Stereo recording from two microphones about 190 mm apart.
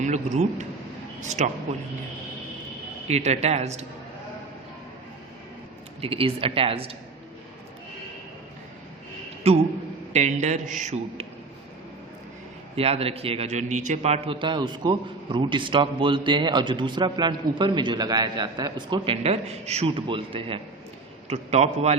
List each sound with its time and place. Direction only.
0.0 s a man's voice: 40° right (ahead or behind)
3.1 s a man's voice: 35° right (ahead or behind)
6.0 s a man's voice: 30° right (ahead or behind)
9.5 s a man's voice: 30° right (ahead or behind)
12.7 s a man's voice: 30° right (ahead or behind)